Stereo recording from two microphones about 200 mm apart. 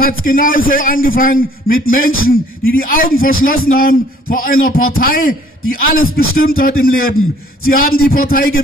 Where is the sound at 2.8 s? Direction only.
45° left (ahead or behind).